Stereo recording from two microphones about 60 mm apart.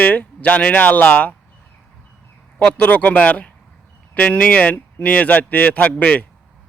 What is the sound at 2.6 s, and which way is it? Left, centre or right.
A man's voice, centre.